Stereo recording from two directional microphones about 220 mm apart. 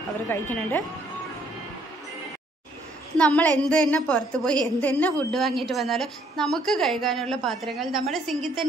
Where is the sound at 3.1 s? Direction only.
5° left (ahead or behind).